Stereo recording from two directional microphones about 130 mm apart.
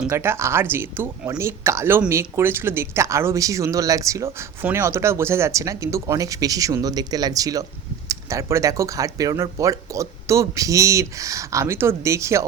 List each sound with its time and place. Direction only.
0.1 s speech: 20° right (ahead or behind)